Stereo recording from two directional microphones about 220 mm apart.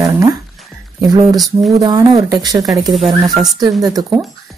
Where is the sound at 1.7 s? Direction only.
15° right (ahead or behind).